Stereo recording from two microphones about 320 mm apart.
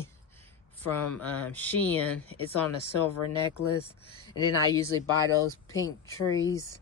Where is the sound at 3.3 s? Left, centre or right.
Left.